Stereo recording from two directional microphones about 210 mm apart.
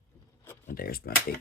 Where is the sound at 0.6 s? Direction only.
45° left (ahead or behind).